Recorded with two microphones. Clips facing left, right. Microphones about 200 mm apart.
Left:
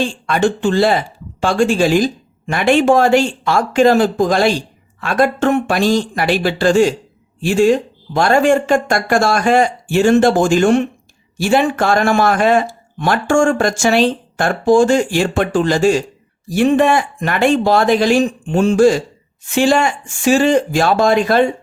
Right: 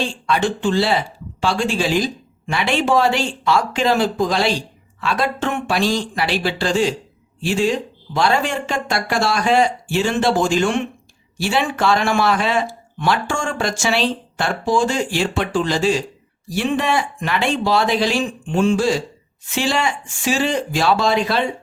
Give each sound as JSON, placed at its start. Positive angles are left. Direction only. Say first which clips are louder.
{"t": 0.0, "sound": "speech", "louder": "left 4 dB", "side_deg": 50}